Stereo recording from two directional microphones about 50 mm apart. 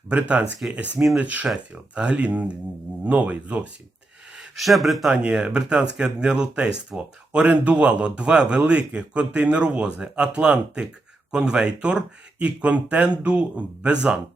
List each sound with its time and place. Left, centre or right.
0.1 s speech: right
4.5 s speech: centre
5.0 s speech: centre